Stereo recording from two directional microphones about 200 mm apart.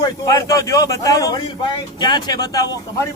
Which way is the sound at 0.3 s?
15° left (ahead or behind).